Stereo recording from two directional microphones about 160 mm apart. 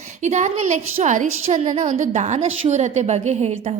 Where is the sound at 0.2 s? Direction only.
50° right (ahead or behind).